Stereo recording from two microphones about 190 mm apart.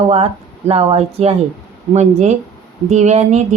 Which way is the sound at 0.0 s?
30° right (ahead or behind).